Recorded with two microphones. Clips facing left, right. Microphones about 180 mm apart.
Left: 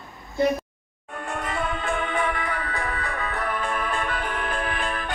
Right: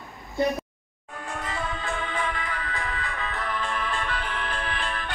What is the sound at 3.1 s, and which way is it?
Music, 45° left (ahead or behind).